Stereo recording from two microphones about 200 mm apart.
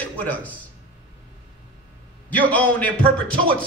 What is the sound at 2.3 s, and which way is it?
Speech, 10° left (ahead or behind).